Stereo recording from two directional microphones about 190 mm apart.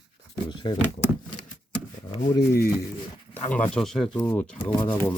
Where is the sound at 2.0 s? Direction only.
20° left (ahead or behind).